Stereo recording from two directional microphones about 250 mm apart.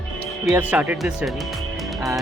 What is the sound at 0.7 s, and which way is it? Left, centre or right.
Speech, centre.